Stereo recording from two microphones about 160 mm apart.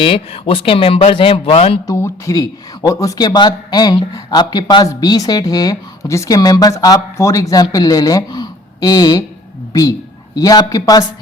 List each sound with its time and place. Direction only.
0.0 s speech: 35° left (ahead or behind)
1.9 s a man's voice: 20° left (ahead or behind)
10.3 s a man's voice: 25° left (ahead or behind)